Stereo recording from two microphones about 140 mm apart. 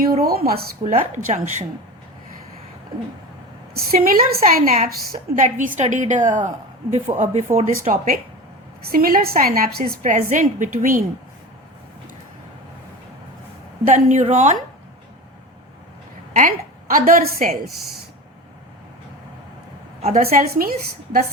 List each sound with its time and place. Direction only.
0.1 s a woman's voice: 90° right; by 1.6 s 60° right (ahead or behind)
3.8 s a woman's voice: 90° right
5.3 s a woman's voice: 65° right (ahead or behind)
7.5 s speech: 50° right (ahead or behind)
7.9 s a woman's voice: 90° right
9.9 s a woman's voice: 65° right (ahead or behind)
13.8 s a woman's voice: 65° right (ahead or behind)
16.3 s a woman's voice: 70° right (ahead or behind)
20.0 s a woman's voice: 50° right (ahead or behind)
20.2 s a woman's voice: 90° right